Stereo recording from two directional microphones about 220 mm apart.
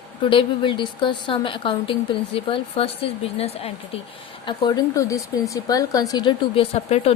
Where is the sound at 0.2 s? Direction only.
25° left (ahead or behind).